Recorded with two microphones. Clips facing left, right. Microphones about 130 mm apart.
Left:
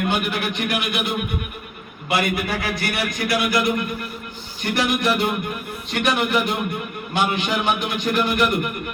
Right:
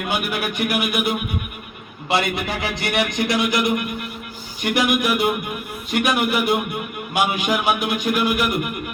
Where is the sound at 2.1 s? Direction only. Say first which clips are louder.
Even; 25° right (ahead or behind).